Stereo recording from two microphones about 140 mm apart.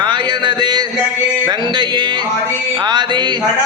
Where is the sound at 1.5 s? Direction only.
35° right (ahead or behind).